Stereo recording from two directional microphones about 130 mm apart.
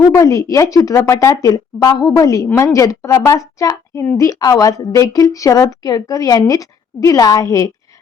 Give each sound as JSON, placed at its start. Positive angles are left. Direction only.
{"t": 0.1, "sound": "a woman's voice", "side_deg": 25}